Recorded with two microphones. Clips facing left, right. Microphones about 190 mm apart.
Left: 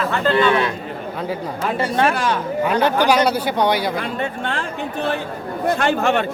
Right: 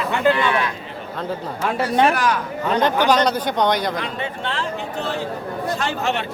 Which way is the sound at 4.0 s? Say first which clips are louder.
Left 3 dB; 50° left (ahead or behind).